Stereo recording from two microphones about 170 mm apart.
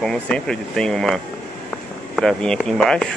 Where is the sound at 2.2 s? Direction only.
5° left (ahead or behind).